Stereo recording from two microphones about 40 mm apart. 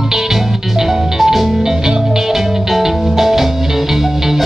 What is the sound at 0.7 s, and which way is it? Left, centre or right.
Music, centre.